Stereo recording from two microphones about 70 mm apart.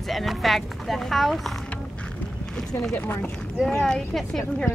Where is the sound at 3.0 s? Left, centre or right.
Left.